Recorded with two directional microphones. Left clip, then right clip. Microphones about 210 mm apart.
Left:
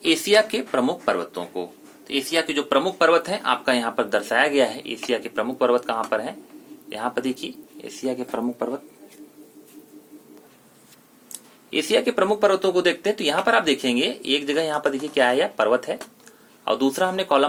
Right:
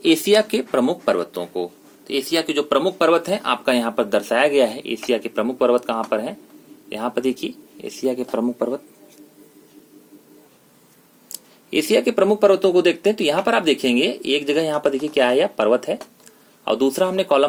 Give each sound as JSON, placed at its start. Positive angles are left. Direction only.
{"t": 0.0, "sound": "speech", "side_deg": -50}
{"t": 11.3, "sound": "speech", "side_deg": -50}